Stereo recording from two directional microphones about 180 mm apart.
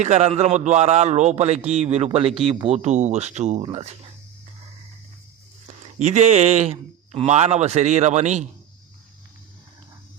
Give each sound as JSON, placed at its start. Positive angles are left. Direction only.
{"t": 0.0, "sound": "a man's voice", "side_deg": -35}
{"t": 5.6, "sound": "a man's voice", "side_deg": -40}